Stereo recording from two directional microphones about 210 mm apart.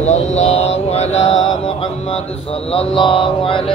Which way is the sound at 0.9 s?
30° left (ahead or behind).